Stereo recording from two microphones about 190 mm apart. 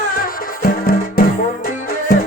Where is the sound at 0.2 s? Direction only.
50° left (ahead or behind).